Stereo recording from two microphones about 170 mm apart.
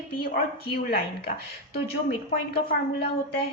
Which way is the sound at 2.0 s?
65° left (ahead or behind).